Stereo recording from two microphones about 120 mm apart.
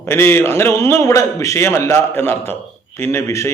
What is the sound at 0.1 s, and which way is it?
A man's voice, 20° left (ahead or behind).